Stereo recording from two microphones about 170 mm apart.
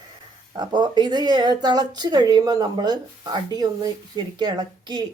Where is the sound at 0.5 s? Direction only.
25° right (ahead or behind).